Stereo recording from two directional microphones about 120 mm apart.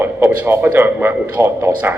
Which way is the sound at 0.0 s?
20° right (ahead or behind).